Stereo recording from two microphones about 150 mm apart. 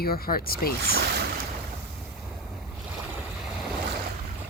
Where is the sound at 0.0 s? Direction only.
80° left.